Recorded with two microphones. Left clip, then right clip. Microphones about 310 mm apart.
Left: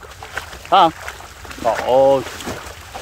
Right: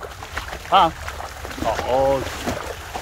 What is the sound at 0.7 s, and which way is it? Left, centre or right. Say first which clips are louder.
Speech: left 3 dB; left.